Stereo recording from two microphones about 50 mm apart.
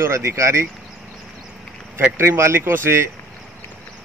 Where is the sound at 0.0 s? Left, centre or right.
Right.